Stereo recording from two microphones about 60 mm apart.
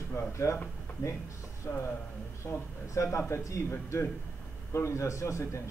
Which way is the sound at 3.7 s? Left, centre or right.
Left.